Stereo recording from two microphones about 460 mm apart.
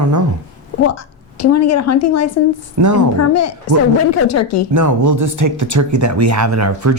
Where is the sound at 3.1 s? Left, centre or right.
Left.